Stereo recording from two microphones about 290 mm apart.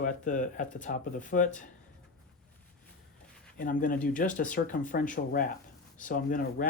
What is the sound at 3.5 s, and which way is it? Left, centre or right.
Speech, left.